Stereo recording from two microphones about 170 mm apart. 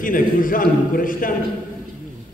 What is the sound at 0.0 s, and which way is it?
A man's voice, 55° left (ahead or behind).